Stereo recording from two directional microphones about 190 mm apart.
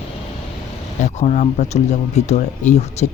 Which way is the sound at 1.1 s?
35° left (ahead or behind).